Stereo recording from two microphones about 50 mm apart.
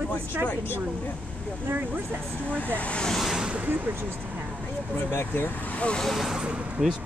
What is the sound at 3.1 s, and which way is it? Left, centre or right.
Speech, centre.